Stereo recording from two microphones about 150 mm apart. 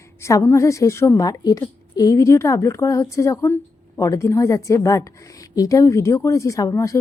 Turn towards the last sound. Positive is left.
turn(degrees=20)  # may be behind; listen again after turning